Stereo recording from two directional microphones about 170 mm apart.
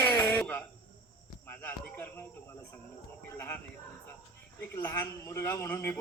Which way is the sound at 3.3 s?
15° left (ahead or behind).